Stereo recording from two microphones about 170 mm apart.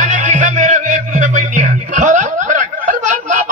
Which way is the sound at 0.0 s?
45° right (ahead or behind).